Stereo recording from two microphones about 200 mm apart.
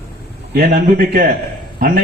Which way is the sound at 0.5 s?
50° right (ahead or behind).